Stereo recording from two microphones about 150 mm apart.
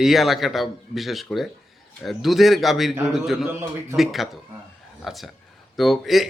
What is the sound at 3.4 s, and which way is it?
Speech, 15° right (ahead or behind).